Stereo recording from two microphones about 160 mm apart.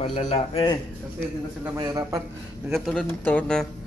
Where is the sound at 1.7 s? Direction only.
25° right (ahead or behind).